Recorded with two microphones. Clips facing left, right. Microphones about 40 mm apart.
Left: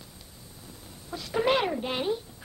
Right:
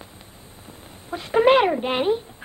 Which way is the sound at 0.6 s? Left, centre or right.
Right.